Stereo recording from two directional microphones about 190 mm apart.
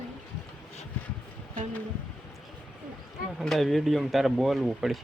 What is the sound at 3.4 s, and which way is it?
Speech, centre (ahead or behind).